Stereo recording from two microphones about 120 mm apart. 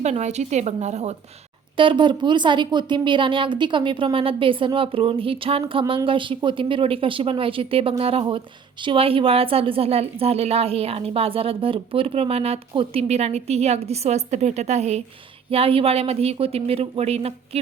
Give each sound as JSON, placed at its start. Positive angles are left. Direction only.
{"t": 0.0, "sound": "a woman's voice", "side_deg": -70}
{"t": 1.7, "sound": "a woman's voice", "side_deg": -45}
{"t": 15.4, "sound": "a woman's voice", "side_deg": -55}